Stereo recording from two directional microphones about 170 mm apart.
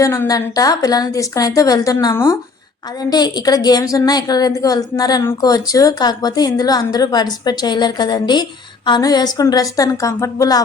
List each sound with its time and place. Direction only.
0.0 s a woman's voice: 15° left (ahead or behind)